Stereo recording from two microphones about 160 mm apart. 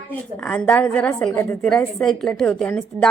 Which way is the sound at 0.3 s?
5° left (ahead or behind).